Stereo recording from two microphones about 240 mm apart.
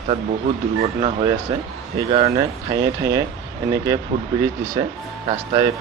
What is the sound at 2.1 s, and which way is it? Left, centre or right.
Speech, right.